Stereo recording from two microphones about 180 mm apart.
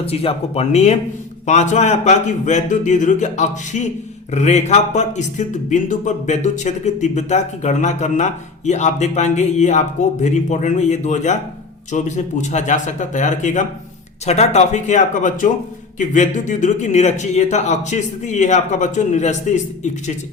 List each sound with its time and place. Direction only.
0.0 s speech: 35° left (ahead or behind)